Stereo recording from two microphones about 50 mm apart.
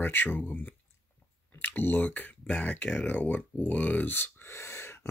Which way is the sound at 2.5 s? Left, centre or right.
Left.